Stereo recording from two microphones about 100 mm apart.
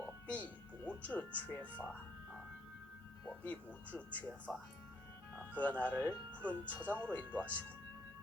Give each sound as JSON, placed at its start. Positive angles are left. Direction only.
{"t": 0.3, "sound": "music", "side_deg": 15}
{"t": 3.2, "sound": "speech", "side_deg": 15}
{"t": 5.5, "sound": "speech", "side_deg": 15}